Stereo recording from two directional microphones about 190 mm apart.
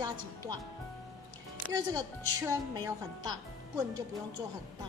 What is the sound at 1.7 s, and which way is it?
A woman's voice, 20° right (ahead or behind).